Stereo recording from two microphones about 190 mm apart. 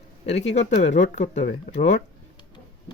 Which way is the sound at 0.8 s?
40° left (ahead or behind).